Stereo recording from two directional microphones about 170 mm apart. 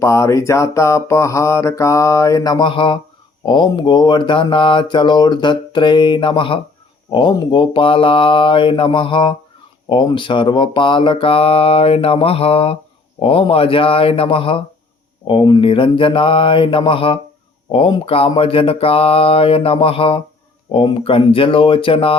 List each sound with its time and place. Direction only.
0.0 s mantra: 15° left (ahead or behind)
3.4 s speech: 25° left (ahead or behind)